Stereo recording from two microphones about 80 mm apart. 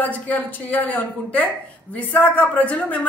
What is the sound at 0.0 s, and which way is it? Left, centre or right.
A woman's voice, left.